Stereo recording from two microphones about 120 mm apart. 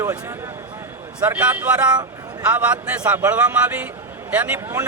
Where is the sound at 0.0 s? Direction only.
25° right (ahead or behind).